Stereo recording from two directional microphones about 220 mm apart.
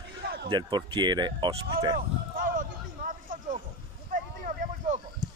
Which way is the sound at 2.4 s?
35° right (ahead or behind).